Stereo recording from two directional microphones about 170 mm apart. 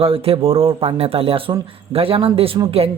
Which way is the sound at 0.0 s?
35° right (ahead or behind).